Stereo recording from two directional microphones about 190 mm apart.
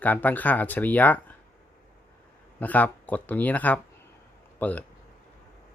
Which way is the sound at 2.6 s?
10° left (ahead or behind).